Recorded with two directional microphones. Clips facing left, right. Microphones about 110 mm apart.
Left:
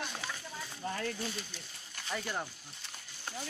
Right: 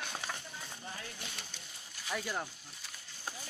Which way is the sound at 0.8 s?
55° left (ahead or behind).